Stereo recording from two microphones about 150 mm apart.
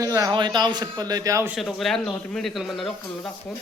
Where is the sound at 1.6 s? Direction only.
Centre (ahead or behind).